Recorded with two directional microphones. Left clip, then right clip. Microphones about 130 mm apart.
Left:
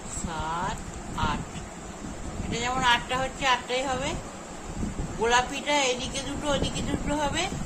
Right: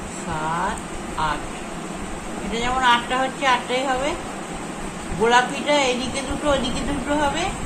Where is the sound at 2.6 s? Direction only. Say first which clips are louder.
Right 6 dB; 25° left (ahead or behind).